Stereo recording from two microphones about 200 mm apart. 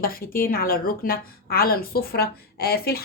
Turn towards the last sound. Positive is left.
turn(degrees=50)  # may be behind; listen again after turning